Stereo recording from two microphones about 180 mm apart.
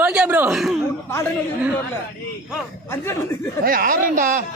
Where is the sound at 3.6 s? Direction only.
55° right (ahead or behind).